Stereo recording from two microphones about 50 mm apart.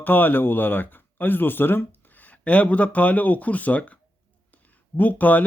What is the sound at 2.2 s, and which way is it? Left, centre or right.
Speech, left.